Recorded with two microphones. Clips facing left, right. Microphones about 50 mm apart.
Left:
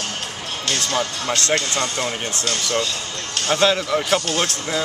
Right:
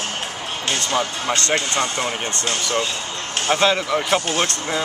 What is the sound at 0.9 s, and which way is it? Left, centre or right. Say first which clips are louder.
Speech: right 2 dB; centre.